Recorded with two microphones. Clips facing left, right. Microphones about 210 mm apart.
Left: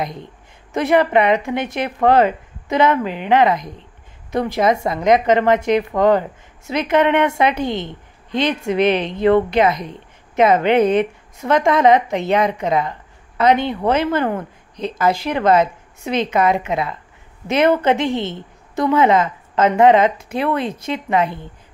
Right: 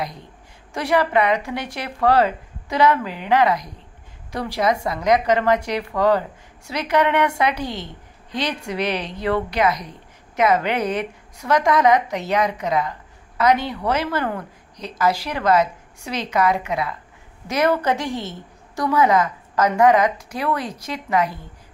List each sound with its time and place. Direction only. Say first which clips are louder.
0.0 s a woman's voice: left 4 dB; 20° left (ahead or behind)